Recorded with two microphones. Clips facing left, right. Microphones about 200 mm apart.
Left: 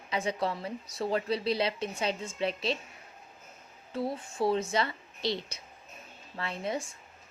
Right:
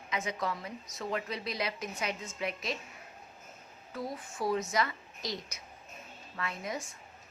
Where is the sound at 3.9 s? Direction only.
30° left (ahead or behind).